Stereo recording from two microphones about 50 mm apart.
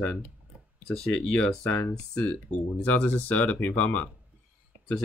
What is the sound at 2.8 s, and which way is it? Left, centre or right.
Speech, left.